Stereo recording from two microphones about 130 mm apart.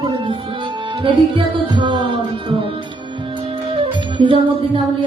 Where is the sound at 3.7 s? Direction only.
40° right (ahead or behind).